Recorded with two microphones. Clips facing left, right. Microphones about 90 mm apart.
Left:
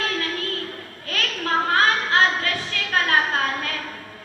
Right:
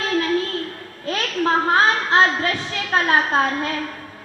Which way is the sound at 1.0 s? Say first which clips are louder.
Right 6 dB; 20° right (ahead or behind).